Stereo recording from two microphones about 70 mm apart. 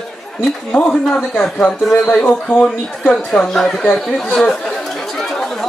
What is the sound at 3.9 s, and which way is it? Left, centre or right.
Speech, centre.